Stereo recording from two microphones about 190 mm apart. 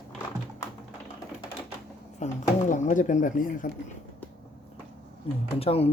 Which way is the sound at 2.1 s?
40° left (ahead or behind).